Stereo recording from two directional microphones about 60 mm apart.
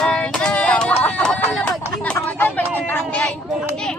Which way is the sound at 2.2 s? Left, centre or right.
Left.